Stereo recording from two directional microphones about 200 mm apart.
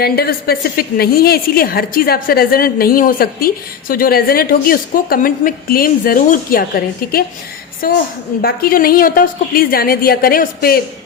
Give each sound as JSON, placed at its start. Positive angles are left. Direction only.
{"t": 0.0, "sound": "a woman's voice", "side_deg": 50}